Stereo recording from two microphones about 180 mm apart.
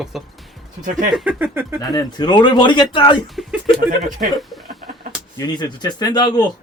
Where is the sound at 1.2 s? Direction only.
10° right (ahead or behind).